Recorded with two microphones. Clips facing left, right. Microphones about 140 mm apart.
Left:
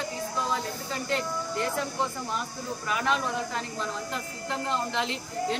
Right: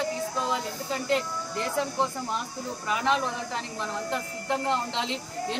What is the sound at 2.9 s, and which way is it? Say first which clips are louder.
Speech: right 2 dB; 25° right (ahead or behind).